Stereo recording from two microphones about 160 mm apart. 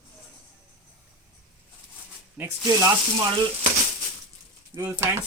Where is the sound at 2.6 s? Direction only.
20° right (ahead or behind).